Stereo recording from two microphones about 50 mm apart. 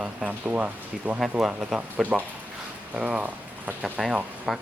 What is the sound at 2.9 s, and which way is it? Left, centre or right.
Speech, right.